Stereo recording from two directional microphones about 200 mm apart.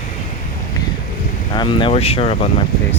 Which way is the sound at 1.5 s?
25° left (ahead or behind).